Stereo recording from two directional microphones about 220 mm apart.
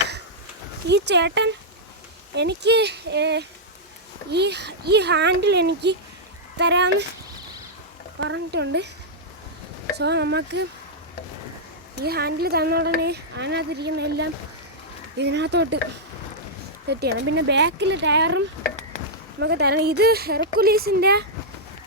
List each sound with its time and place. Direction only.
0.9 s speech: 50° right (ahead or behind)
8.2 s speech: 55° right (ahead or behind)
10.0 s speech: 50° right (ahead or behind)
12.0 s speech: 45° right (ahead or behind)
16.9 s speech: 50° right (ahead or behind)